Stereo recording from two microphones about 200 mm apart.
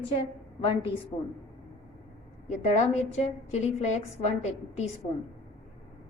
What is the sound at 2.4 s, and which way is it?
A woman's voice, 35° left (ahead or behind).